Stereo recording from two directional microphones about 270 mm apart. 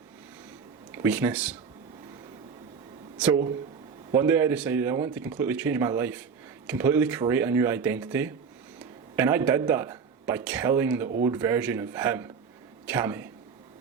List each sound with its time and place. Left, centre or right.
0.9 s speech: centre
4.1 s a man's voice: centre